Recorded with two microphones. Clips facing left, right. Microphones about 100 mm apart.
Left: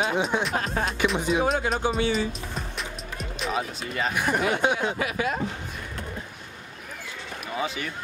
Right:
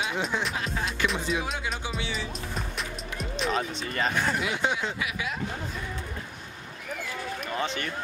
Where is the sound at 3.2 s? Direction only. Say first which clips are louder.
Right 1 dB; centre (ahead or behind).